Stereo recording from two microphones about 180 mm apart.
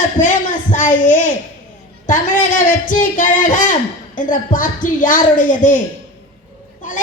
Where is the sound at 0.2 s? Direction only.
45° left (ahead or behind).